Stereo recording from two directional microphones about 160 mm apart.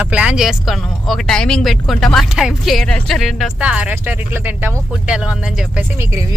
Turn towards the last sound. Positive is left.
turn(degrees=-5)  # may be behind; listen again after turning